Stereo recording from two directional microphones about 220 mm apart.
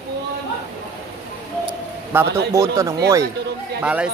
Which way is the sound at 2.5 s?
15° right (ahead or behind).